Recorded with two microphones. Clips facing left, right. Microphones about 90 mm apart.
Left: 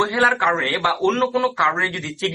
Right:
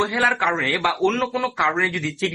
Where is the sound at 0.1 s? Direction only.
15° left (ahead or behind).